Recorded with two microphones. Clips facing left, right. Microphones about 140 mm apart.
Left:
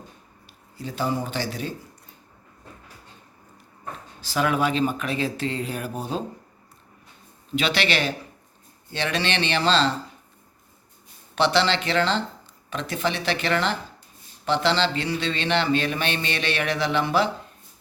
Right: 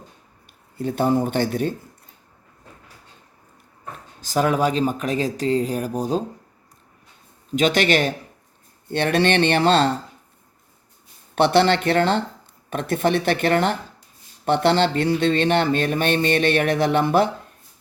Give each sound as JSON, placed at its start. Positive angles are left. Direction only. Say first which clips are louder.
{"t": 0.8, "sound": "speech", "louder": "right 7 dB", "side_deg": -55}
{"t": 4.2, "sound": "speech", "louder": "right 4 dB", "side_deg": -45}
{"t": 7.5, "sound": "speech", "louder": "right 6 dB", "side_deg": -45}
{"t": 11.3, "sound": "speech", "louder": "right 5 dB", "side_deg": -55}